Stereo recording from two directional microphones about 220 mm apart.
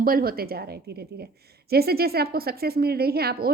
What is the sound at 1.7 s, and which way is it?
A woman's voice, 45° right (ahead or behind).